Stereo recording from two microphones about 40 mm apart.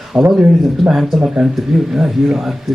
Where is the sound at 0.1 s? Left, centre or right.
Right.